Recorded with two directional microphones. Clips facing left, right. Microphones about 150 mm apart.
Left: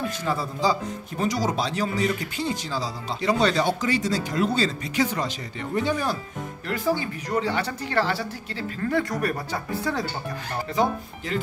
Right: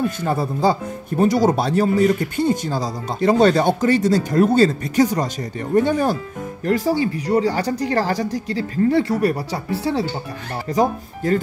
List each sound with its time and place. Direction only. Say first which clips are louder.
0.2 s speech: right 3 dB; 55° right (ahead or behind)
6.6 s speech: right 7 dB; 40° right (ahead or behind)
10.7 s speech: right 6 dB; 45° right (ahead or behind)